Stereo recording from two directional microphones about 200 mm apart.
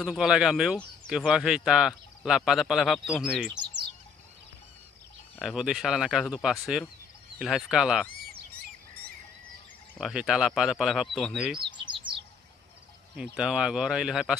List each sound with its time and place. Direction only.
0.0 s speech: centre (ahead or behind)
5.4 s speech: centre (ahead or behind)
9.9 s speech: centre (ahead or behind)
11.6 s bird: 25° right (ahead or behind)
13.1 s speech: 5° right (ahead or behind)